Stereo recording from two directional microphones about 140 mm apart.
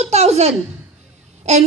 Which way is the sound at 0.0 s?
50° right (ahead or behind).